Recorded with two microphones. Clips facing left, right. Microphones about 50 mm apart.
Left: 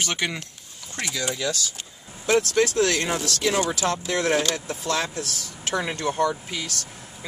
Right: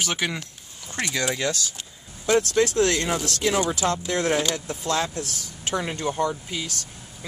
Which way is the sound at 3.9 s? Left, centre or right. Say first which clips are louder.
Even; left.